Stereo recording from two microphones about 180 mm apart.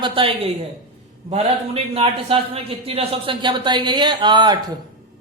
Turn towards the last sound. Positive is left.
turn(degrees=-25)  # may be behind; listen again after turning